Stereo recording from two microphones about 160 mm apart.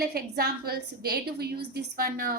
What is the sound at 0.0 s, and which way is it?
A woman's voice, 75° right (ahead or behind).